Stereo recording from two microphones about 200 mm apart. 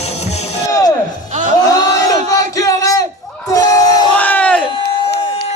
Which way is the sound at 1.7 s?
20° left (ahead or behind).